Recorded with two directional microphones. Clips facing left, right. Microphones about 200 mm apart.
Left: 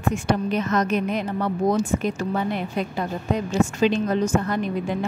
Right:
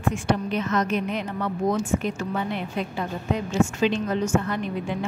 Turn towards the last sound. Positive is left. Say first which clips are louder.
# left 3 dB
turn(degrees=40)  # may be behind; listen again after turning